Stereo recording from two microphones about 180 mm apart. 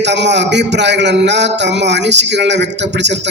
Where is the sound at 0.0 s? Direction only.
75° right (ahead or behind).